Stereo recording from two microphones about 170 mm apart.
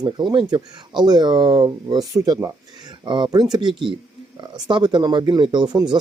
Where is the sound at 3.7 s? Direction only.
Centre (ahead or behind).